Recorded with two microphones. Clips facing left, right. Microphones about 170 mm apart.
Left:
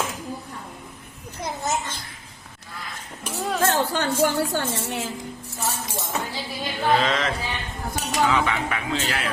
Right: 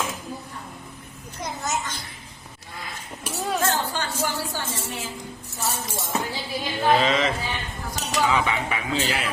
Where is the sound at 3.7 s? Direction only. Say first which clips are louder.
Left 5 dB; 65° left (ahead or behind).